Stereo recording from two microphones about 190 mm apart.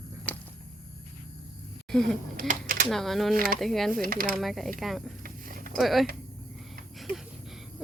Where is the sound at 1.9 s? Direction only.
Centre (ahead or behind).